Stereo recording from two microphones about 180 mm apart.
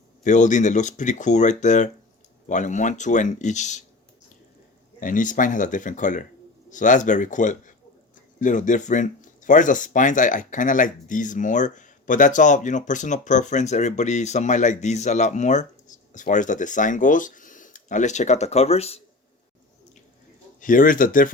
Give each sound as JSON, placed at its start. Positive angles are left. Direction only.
{"t": 0.3, "sound": "speech", "side_deg": 40}
{"t": 4.9, "sound": "speech", "side_deg": 45}
{"t": 20.6, "sound": "speech", "side_deg": 50}